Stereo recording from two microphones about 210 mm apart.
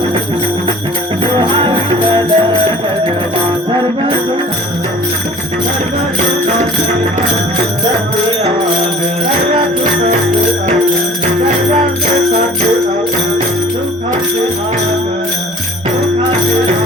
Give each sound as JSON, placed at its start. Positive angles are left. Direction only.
{"t": 1.2, "sound": "music", "side_deg": -20}
{"t": 3.7, "sound": "music", "side_deg": -20}
{"t": 9.6, "sound": "music", "side_deg": -30}